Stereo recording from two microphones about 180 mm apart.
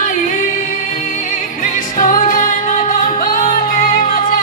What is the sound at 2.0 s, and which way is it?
Music, 50° left (ahead or behind).